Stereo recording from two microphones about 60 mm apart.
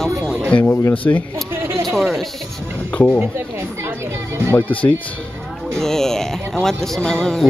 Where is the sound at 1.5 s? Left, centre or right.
Right.